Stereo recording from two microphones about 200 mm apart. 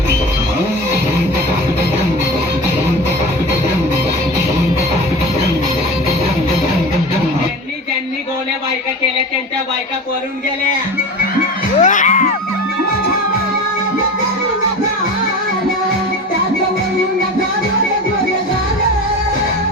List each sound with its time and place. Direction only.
11.3 s music: 40° left (ahead or behind)